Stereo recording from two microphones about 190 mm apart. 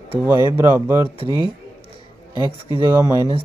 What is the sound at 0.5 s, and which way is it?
Speech, 10° right (ahead or behind).